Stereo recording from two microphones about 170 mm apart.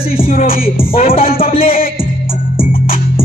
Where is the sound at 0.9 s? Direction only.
35° left (ahead or behind).